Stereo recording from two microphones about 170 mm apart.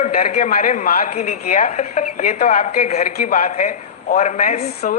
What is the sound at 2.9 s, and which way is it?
Speech, 40° left (ahead or behind).